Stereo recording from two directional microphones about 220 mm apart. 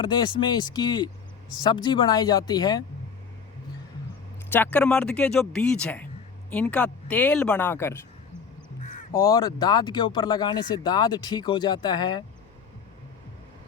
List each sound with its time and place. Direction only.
0.0 s speech: 20° left (ahead or behind)
4.5 s speech: 10° left (ahead or behind)
8.8 s crow: 35° left (ahead or behind)
9.2 s speech: 15° left (ahead or behind)